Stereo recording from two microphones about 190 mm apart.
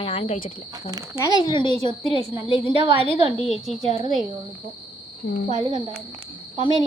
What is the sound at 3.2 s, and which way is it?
Speech, 30° left (ahead or behind).